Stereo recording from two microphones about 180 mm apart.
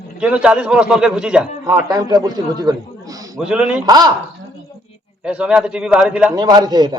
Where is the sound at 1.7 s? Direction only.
20° right (ahead or behind).